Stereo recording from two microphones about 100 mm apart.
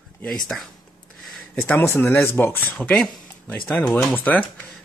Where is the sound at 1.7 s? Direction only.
25° left (ahead or behind).